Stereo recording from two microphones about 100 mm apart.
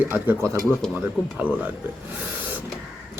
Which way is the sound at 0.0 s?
20° right (ahead or behind).